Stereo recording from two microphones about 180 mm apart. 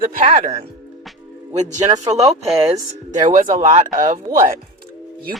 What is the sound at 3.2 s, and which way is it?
Speech, 45° right (ahead or behind).